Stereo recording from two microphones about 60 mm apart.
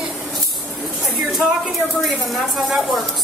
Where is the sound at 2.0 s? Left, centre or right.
Centre.